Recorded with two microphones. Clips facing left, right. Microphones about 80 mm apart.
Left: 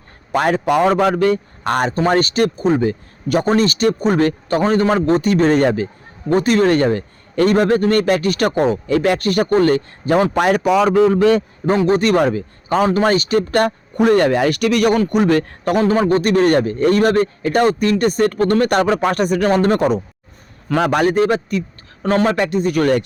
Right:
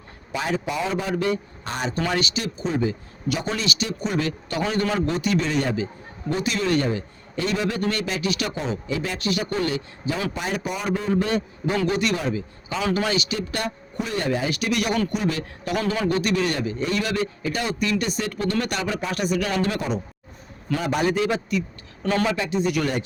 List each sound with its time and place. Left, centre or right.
0.3 s a man's voice: left
10.3 s a man's voice: left
11.9 s a man's voice: left
15.7 s a man's voice: left
20.7 s a man's voice: left